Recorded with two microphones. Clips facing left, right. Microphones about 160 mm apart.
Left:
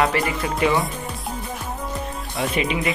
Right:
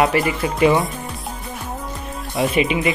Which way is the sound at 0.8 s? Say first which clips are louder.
Right 2 dB; centre (ahead or behind).